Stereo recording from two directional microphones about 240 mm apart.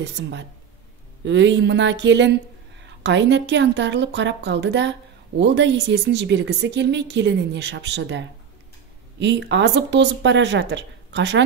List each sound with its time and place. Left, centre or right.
0.0 s speech: right